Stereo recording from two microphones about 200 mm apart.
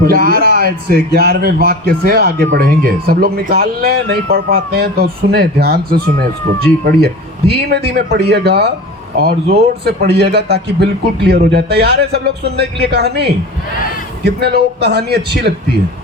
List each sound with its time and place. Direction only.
0.0 s speech: 50° right (ahead or behind)